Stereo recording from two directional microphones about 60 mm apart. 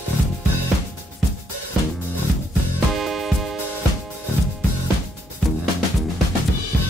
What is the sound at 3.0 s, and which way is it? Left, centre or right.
Music, centre.